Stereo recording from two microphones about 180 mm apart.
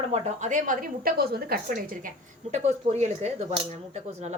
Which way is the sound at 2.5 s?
40° right (ahead or behind).